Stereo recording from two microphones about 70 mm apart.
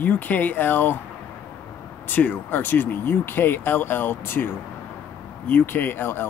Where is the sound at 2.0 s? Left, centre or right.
Left.